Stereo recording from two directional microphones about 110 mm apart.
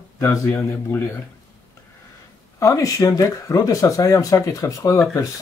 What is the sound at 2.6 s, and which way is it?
Speech, 30° left (ahead or behind).